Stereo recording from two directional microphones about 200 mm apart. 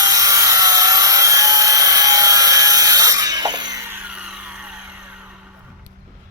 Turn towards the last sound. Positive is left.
turn(degrees=-5)  # may be behind; listen again after turning